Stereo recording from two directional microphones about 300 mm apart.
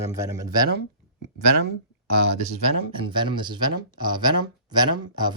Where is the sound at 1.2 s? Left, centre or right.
Right.